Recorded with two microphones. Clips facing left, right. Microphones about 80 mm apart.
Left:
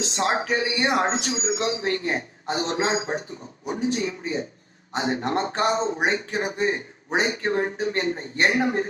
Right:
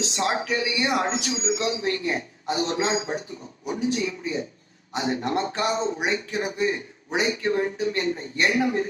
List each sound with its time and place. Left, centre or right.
0.0 s speech: left